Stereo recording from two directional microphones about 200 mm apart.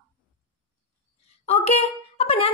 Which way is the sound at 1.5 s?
35° left (ahead or behind).